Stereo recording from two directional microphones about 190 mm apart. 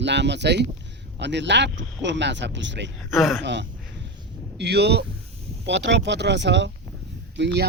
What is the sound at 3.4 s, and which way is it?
Speech, 65° right (ahead or behind).